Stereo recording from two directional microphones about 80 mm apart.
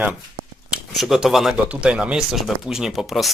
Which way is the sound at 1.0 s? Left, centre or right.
Centre.